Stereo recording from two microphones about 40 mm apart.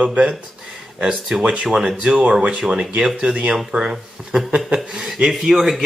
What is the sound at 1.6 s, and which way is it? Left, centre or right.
Speech, centre.